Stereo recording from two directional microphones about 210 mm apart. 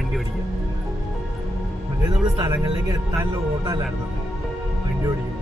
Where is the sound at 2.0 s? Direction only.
15° right (ahead or behind).